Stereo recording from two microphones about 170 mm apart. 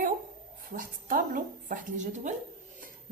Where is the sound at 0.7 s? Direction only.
55° right (ahead or behind).